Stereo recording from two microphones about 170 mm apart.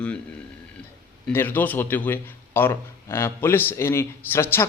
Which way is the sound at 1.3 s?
10° left (ahead or behind).